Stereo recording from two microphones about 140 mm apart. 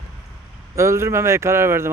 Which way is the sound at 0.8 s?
20° right (ahead or behind).